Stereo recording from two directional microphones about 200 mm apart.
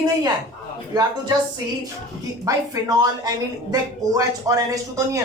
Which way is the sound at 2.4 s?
15° right (ahead or behind).